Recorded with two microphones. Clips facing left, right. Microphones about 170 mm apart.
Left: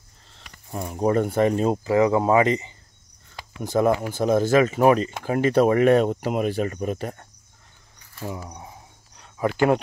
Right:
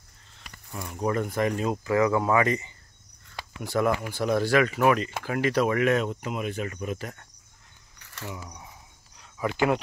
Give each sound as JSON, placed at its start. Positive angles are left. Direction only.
{"t": 0.7, "sound": "speech", "side_deg": 35}